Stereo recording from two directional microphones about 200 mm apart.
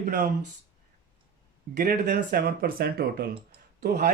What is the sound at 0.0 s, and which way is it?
Speech, 45° right (ahead or behind).